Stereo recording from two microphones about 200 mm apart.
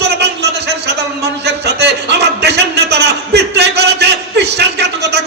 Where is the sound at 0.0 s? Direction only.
55° right (ahead or behind).